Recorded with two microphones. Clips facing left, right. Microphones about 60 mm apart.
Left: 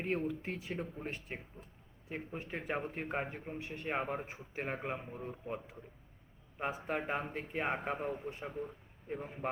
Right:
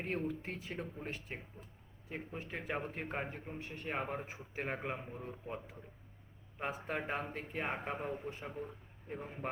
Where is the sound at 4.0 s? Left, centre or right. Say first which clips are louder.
Left 2 dB; centre.